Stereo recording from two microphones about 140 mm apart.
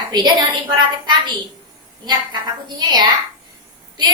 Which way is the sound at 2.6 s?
30° right (ahead or behind).